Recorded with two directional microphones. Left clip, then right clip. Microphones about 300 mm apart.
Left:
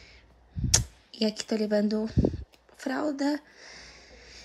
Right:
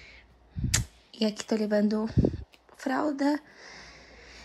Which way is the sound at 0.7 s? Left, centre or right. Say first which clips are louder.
Left 4 dB; centre.